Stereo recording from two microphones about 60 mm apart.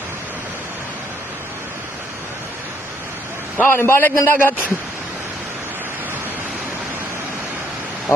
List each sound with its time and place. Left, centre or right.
3.6 s a man's voice: left